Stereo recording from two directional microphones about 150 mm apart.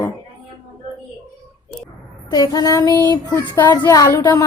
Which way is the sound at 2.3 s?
25° left (ahead or behind).